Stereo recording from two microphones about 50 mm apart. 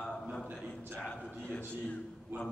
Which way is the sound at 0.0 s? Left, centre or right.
Centre.